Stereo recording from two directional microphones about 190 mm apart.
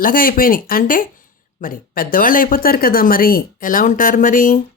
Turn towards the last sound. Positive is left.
turn(degrees=45)  # may be behind; listen again after turning